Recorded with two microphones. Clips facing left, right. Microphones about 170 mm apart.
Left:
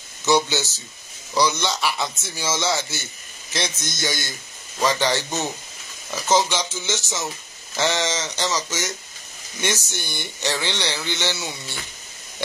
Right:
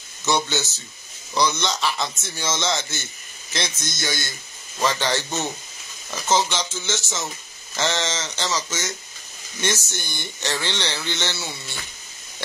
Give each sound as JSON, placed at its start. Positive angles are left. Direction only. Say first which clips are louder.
{"t": 0.2, "sound": "speech", "louder": "left 3 dB", "side_deg": 10}